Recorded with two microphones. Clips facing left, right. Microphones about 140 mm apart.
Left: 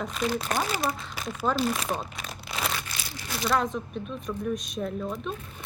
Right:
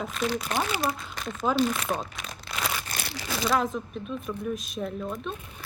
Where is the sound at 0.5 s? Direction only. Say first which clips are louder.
Even; 40° left (ahead or behind).